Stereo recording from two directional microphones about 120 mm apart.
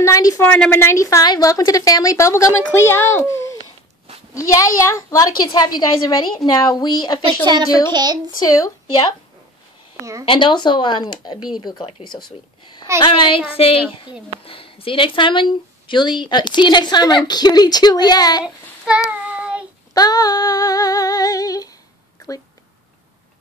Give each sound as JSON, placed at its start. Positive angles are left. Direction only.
{"t": 0.0, "sound": "a sound", "side_deg": 30}
{"t": 0.4, "sound": "a woman's voice", "side_deg": 15}
{"t": 7.4, "sound": "speech", "side_deg": -35}
{"t": 8.4, "sound": "a woman's voice", "side_deg": 30}
{"t": 10.2, "sound": "a woman's voice", "side_deg": 45}
{"t": 18.4, "sound": "child singing", "side_deg": -10}
{"t": 19.9, "sound": "speech", "side_deg": 35}